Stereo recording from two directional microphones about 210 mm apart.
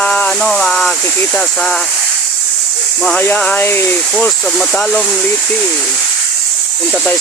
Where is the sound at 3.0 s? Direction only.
5° left (ahead or behind).